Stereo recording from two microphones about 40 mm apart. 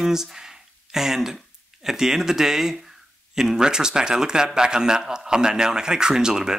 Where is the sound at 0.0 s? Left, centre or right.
Centre.